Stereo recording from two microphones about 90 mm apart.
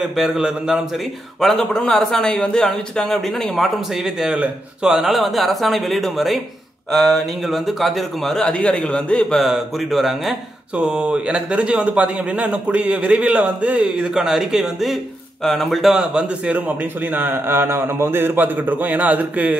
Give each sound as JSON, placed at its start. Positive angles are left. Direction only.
{"t": 0.0, "sound": "a man's voice", "side_deg": -5}
{"t": 1.4, "sound": "a man's voice", "side_deg": 5}
{"t": 10.8, "sound": "a man's voice", "side_deg": -10}